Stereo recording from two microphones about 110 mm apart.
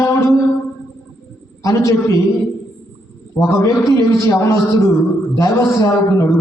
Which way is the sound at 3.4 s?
30° left (ahead or behind).